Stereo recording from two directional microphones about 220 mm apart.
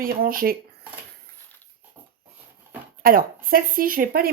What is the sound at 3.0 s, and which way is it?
Speech, 40° right (ahead or behind).